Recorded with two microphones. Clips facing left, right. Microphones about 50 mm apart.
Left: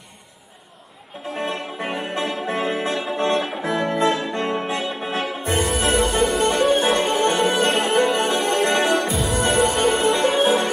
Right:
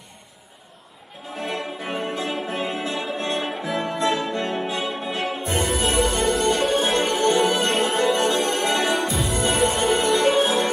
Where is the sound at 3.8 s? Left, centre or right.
Left.